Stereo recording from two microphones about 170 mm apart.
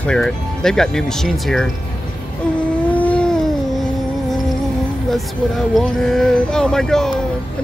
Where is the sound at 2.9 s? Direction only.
10° left (ahead or behind).